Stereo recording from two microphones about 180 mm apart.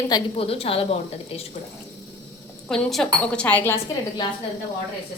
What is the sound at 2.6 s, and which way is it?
Speech, centre (ahead or behind).